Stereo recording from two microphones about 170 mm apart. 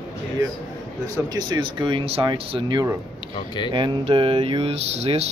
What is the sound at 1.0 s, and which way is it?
Speech, 25° right (ahead or behind).